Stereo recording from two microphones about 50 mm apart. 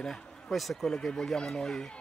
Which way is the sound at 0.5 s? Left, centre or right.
Centre.